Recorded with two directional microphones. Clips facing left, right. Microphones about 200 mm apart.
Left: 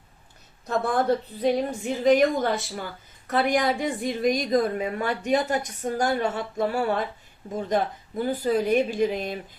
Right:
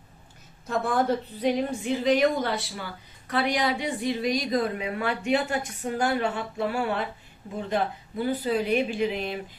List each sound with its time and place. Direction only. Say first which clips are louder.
0.7 s a woman's voice: left 2 dB; 40° left (ahead or behind)
8.2 s a woman's voice: left 2 dB; 45° left (ahead or behind)